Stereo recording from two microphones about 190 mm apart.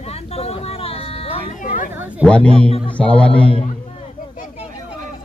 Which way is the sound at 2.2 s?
5° left (ahead or behind).